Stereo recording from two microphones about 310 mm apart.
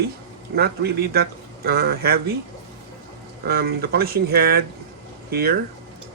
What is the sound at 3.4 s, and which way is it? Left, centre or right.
Speech, right.